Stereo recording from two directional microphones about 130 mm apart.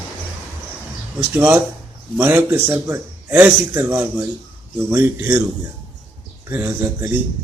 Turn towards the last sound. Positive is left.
turn(degrees=-20)  # may be behind; listen again after turning